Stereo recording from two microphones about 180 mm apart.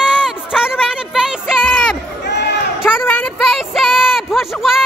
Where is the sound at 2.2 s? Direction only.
70° left (ahead or behind).